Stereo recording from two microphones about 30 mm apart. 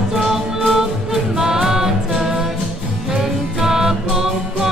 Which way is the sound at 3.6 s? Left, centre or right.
Centre.